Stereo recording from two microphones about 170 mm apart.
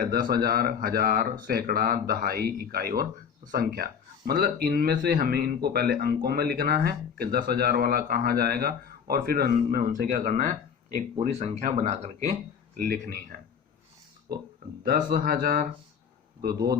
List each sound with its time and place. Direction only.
0.0 s speech: 60° right (ahead or behind); by 12.3 s 45° right (ahead or behind)
12.7 s speech: 60° right (ahead or behind)
14.8 s speech: 60° right (ahead or behind)